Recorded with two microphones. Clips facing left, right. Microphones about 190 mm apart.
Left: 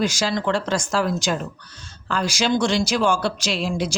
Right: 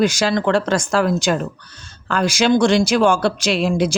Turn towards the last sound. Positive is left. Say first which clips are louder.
# right 6 dB
turn(degrees=-55)  # may be behind; listen again after turning